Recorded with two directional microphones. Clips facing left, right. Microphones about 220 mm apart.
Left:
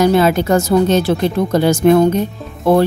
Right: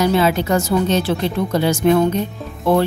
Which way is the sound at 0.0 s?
45° left (ahead or behind).